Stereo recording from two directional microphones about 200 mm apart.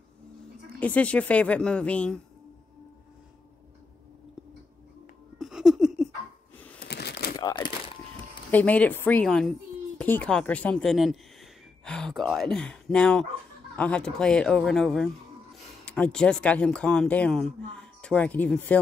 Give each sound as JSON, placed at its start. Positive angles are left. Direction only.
{"t": 0.7, "sound": "a woman's voice", "side_deg": 5}
{"t": 5.4, "sound": "laughter", "side_deg": 0}
{"t": 6.8, "sound": "crumpling", "side_deg": 55}
{"t": 7.3, "sound": "crumpling", "side_deg": 20}
{"t": 8.5, "sound": "a woman's voice", "side_deg": 10}